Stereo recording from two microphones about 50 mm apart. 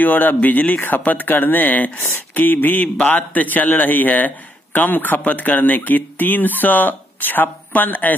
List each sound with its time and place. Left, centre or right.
0.0 s speech: left